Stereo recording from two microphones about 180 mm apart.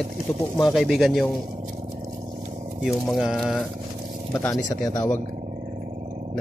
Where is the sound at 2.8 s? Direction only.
Centre (ahead or behind).